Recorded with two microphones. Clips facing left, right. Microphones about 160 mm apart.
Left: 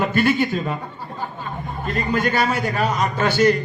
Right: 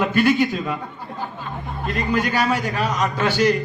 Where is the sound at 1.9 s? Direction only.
45° left (ahead or behind).